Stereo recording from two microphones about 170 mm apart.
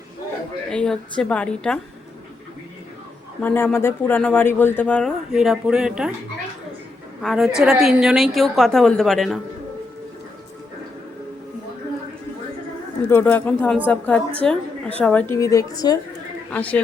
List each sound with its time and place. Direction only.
0.7 s a woman's voice: 5° left (ahead or behind)
3.4 s speech: 10° left (ahead or behind); by 6.1 s 5° right (ahead or behind)
7.2 s a woman's voice: centre (ahead or behind)
13.1 s speech: 10° left (ahead or behind)
15.4 s speech: 20° left (ahead or behind)
16.5 s speech: 10° left (ahead or behind)